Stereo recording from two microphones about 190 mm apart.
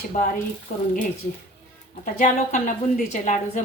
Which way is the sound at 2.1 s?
40° left (ahead or behind).